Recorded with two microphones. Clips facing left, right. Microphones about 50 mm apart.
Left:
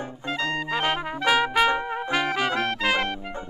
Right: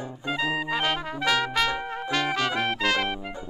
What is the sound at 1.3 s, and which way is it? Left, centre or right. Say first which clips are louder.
Trumpet: left 4 dB; centre.